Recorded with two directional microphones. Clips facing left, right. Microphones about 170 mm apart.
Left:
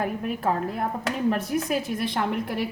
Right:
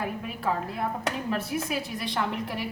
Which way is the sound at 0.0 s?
50° left (ahead or behind).